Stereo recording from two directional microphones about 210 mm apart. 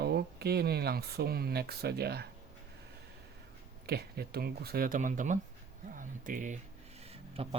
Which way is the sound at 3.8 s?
50° right (ahead or behind).